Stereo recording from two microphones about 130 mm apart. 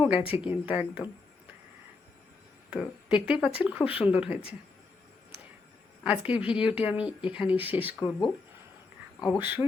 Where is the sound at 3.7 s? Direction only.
45° left (ahead or behind).